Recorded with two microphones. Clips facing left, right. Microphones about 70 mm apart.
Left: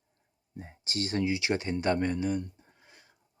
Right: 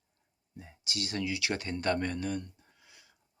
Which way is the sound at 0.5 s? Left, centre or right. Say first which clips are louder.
Left 4 dB; left.